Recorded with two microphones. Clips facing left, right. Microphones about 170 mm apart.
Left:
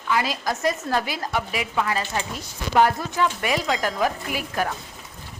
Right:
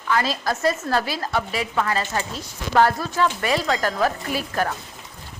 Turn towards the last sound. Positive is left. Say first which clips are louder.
# right 2 dB
turn(degrees=15)  # may be behind; listen again after turning